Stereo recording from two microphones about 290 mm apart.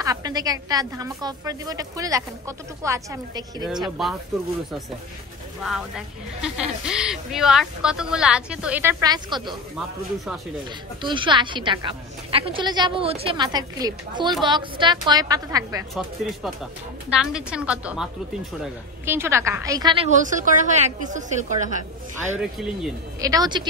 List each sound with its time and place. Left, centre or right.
0.0 s a woman's voice: centre
5.6 s speech: centre
9.8 s speech: centre
11.0 s a woman's voice: centre
15.9 s a woman's voice: centre; by 22.4 s right
22.4 s speech: centre
23.2 s a woman's voice: centre